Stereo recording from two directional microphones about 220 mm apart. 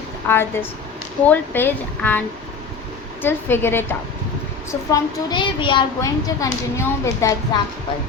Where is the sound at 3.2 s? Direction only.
10° left (ahead or behind).